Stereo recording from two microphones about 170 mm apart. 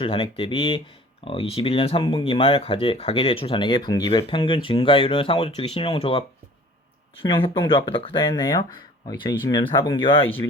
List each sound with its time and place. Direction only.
0.0 s speech: 35° left (ahead or behind)
7.4 s speech: 30° left (ahead or behind)
8.3 s speech: 20° left (ahead or behind)